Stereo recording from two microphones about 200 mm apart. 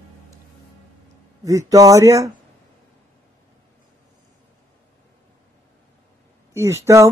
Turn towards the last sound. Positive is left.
turn(degrees=-15)  # may be behind; listen again after turning